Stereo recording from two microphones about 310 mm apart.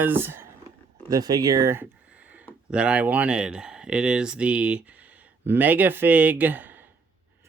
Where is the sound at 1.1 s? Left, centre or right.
Centre.